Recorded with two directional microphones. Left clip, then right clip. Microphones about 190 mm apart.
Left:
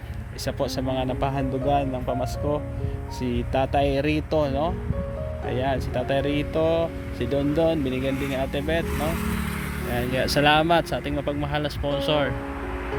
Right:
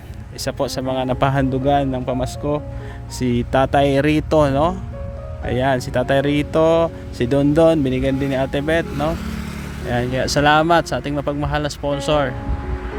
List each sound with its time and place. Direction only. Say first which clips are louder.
0.4 s a man's voice: right 5 dB; 40° right (ahead or behind); by 12.3 s 20° right (ahead or behind)